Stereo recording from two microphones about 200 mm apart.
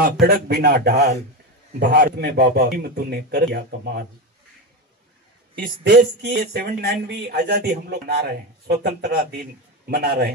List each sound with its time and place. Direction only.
0.0 s speech: 50° right (ahead or behind)
5.6 s speech: 55° right (ahead or behind)